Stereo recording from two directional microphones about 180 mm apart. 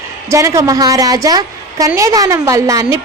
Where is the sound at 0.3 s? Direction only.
15° right (ahead or behind).